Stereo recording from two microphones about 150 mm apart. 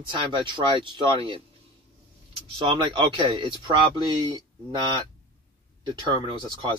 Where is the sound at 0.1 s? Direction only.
35° right (ahead or behind).